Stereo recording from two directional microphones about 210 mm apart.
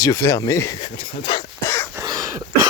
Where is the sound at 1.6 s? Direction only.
10° left (ahead or behind).